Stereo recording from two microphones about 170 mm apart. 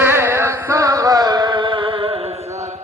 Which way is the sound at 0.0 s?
15° right (ahead or behind).